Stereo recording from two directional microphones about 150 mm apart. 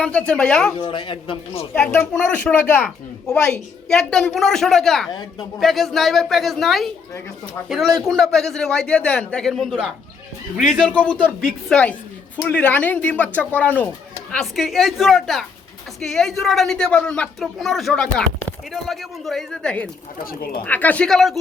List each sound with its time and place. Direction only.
0.0 s a woman's voice: 5° left (ahead or behind)
0.8 s a man's voice: 35° left (ahead or behind)
1.7 s a woman's voice: 15° left (ahead or behind)
8.0 s a woman's voice: centre (ahead or behind)
14.3 s a woman's voice: centre (ahead or behind)